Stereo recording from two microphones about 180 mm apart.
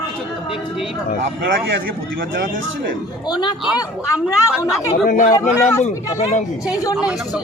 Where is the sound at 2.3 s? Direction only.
80° right.